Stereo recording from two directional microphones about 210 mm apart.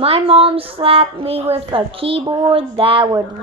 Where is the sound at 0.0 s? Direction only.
30° right (ahead or behind).